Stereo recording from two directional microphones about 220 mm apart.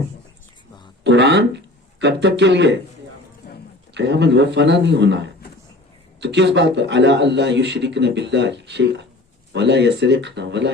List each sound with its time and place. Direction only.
1.0 s speech: 55° right (ahead or behind)
3.9 s a man's voice: 50° right (ahead or behind)